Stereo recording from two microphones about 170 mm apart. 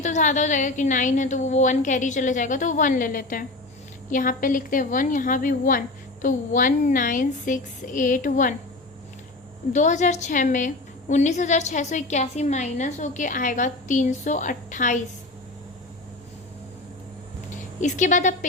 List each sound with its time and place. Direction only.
0.0 s a woman's voice: 45° left (ahead or behind)
9.7 s a woman's voice: 45° left (ahead or behind)
17.5 s speech: 45° left (ahead or behind)